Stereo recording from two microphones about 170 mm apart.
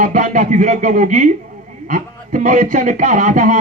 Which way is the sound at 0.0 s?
50° right (ahead or behind).